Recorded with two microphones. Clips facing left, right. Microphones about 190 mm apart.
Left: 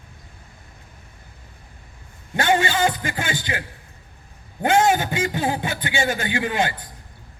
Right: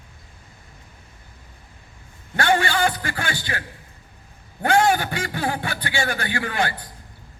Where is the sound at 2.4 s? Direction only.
20° left (ahead or behind).